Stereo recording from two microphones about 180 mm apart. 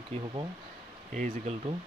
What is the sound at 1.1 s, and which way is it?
Speech, 40° right (ahead or behind).